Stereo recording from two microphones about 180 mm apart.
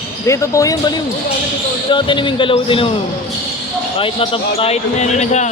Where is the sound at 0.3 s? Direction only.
20° left (ahead or behind).